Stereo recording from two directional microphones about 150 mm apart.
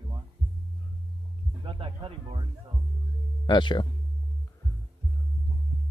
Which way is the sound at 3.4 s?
30° left (ahead or behind).